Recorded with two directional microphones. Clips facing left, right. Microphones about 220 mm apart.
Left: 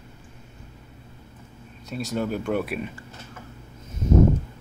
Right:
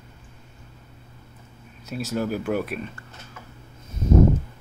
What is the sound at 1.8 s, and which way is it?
Speech, 5° right (ahead or behind).